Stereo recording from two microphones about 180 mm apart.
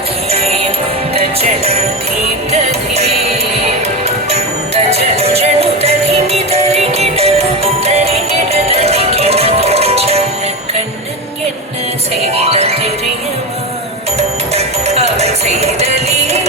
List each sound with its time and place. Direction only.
0.3 s music: 35° right (ahead or behind)
12.4 s music: 35° right (ahead or behind)
14.2 s music: 35° right (ahead or behind)